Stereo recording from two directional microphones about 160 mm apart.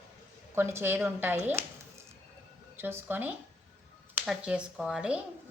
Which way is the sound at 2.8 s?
15° right (ahead or behind).